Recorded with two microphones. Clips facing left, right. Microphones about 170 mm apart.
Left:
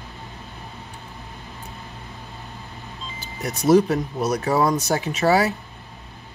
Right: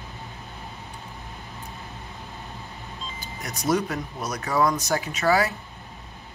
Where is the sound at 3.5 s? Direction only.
30° left (ahead or behind).